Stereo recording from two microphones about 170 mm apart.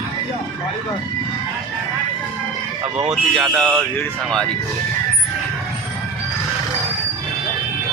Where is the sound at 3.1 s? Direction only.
Centre (ahead or behind).